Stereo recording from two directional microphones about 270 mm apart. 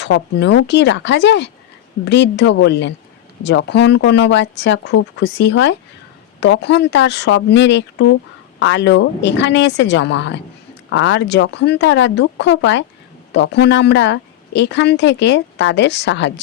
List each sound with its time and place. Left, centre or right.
0.0 s speech: left